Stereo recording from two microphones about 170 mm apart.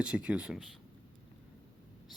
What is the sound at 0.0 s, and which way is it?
Speech, 5° right (ahead or behind).